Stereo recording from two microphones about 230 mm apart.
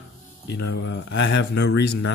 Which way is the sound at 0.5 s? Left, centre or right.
Left.